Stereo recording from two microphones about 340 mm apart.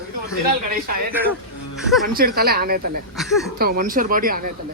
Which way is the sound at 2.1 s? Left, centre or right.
Right.